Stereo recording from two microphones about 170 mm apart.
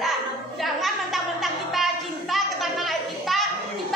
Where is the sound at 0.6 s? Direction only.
Centre (ahead or behind).